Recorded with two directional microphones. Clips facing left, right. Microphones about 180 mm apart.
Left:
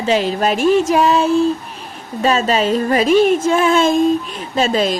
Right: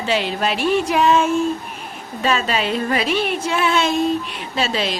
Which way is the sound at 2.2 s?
40° left (ahead or behind).